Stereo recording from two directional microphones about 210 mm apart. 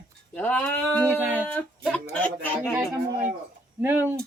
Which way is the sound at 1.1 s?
5° right (ahead or behind).